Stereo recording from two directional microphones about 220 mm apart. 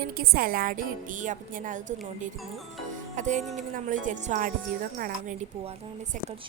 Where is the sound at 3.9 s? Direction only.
35° right (ahead or behind).